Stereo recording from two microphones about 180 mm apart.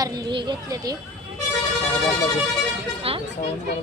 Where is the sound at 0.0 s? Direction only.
25° right (ahead or behind).